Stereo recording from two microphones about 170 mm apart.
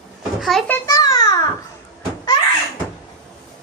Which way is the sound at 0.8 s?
20° left (ahead or behind).